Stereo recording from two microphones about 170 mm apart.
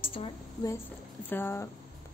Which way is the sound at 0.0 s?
30° left (ahead or behind).